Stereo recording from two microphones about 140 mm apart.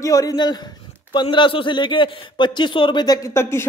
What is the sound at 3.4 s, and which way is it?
Speech, 20° left (ahead or behind).